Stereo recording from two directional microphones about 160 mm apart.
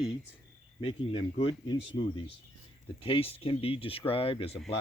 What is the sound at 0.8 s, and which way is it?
Speech, 35° left (ahead or behind).